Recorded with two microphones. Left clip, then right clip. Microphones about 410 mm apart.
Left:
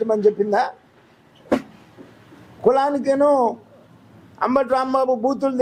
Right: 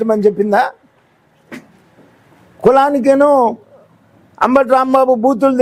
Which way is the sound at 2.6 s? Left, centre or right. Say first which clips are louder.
Right 7 dB; right.